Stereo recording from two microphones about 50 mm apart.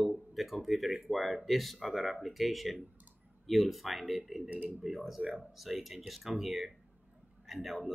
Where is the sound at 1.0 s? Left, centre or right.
Centre.